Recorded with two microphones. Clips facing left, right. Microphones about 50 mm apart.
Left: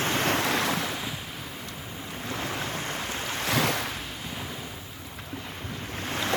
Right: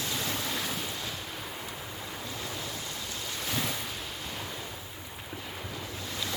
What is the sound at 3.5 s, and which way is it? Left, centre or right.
Waves, left.